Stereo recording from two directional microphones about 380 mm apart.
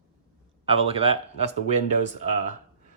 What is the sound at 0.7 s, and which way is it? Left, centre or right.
Speech, centre.